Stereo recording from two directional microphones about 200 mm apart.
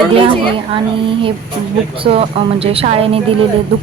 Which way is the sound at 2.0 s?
30° right (ahead or behind).